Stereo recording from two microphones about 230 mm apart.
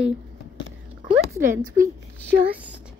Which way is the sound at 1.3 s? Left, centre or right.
Centre.